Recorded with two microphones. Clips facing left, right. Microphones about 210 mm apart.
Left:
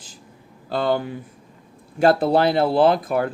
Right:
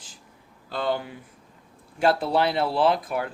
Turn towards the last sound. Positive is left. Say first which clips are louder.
# left 5 dB
turn(degrees=45)  # may be behind; listen again after turning